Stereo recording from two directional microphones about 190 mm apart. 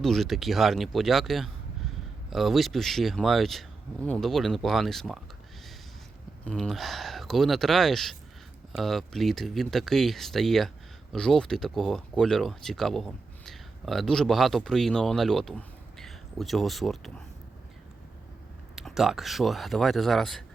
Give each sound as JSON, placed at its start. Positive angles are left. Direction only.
{"t": 0.0, "sound": "speech", "side_deg": 0}
{"t": 6.4, "sound": "speech", "side_deg": 5}
{"t": 18.8, "sound": "speech", "side_deg": 0}